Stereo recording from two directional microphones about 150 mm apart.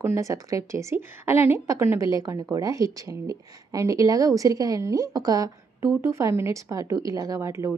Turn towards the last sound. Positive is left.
turn(degrees=-20)  # may be behind; listen again after turning